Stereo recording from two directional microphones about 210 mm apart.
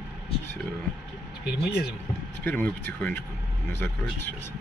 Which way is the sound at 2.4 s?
10° left (ahead or behind).